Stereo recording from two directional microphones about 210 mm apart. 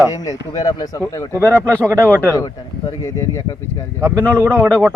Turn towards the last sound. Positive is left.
turn(degrees=-10)  # may be behind; listen again after turning